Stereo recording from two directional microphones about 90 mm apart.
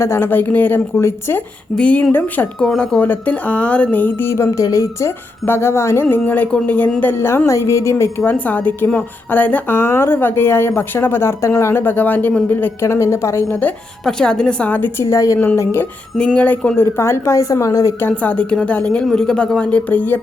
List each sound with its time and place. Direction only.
0.0 s speech: 25° left (ahead or behind)
2.6 s speech: 10° left (ahead or behind); by 8.1 s 35° left (ahead or behind)
8.2 s speech: 20° left (ahead or behind)
13.5 s speech: 15° left (ahead or behind)
14.0 s speech: 5° left (ahead or behind)
15.1 s a woman's voice: 35° left (ahead or behind)
16.1 s speech: 10° left (ahead or behind); by 17.9 s 35° left (ahead or behind)
18.0 s speech: 15° left (ahead or behind)